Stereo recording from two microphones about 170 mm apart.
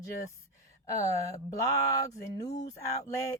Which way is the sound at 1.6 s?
20° left (ahead or behind).